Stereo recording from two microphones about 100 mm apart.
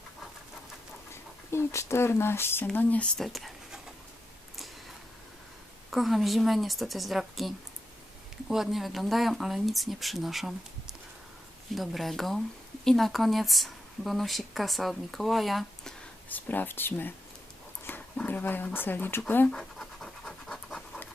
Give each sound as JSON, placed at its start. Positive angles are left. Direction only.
{"t": 1.1, "sound": "speech", "side_deg": 25}
{"t": 3.2, "sound": "speech", "side_deg": 0}
{"t": 5.9, "sound": "speech", "side_deg": 0}
{"t": 16.3, "sound": "speech", "side_deg": 20}
{"t": 18.2, "sound": "speech", "side_deg": 15}
{"t": 19.5, "sound": "scratch", "side_deg": 5}